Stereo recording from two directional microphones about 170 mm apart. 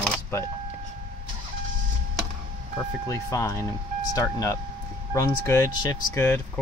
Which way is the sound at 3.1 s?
20° left (ahead or behind).